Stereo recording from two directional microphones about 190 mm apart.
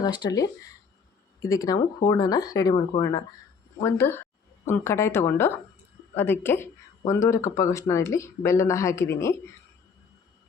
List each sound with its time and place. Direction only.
0.0 s speech: 20° left (ahead or behind)